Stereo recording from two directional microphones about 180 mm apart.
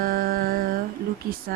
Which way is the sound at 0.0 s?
55° right (ahead or behind).